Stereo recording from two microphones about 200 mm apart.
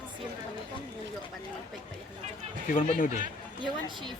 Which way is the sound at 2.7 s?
45° left (ahead or behind).